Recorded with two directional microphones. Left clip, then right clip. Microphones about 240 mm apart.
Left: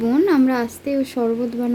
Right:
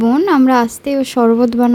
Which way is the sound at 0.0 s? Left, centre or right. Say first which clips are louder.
Right 5 dB; right.